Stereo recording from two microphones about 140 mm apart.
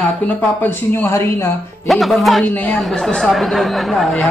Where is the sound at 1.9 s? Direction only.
Centre (ahead or behind).